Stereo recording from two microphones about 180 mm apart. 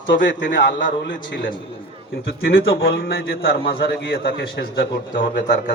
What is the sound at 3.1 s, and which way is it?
Speech, 55° left (ahead or behind).